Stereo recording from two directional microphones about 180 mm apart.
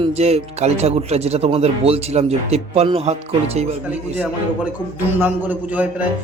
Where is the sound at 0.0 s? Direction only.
35° right (ahead or behind).